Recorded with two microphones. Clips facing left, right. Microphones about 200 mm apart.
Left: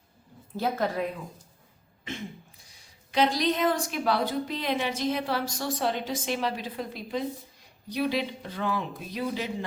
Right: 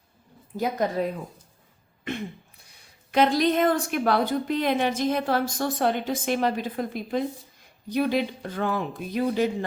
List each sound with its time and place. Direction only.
0.5 s a woman's voice: 15° right (ahead or behind)
2.0 s speech: 60° right (ahead or behind)